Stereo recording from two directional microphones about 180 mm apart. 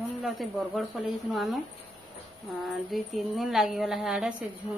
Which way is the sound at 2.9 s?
Centre (ahead or behind).